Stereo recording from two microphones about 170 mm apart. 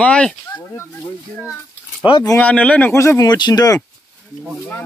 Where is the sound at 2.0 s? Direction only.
30° left (ahead or behind).